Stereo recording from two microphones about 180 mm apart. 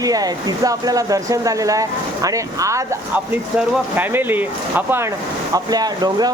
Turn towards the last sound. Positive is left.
turn(degrees=-20)  # may be behind; listen again after turning